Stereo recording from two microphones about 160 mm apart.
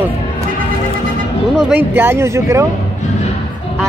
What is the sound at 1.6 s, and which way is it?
Speech, 10° right (ahead or behind).